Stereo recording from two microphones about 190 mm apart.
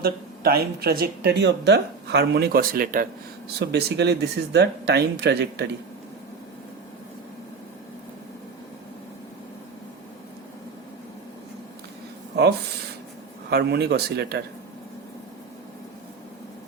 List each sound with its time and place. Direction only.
0.0 s speech: 55° right (ahead or behind)
3.6 s speech: 60° right (ahead or behind)
13.5 s speech: 60° right (ahead or behind)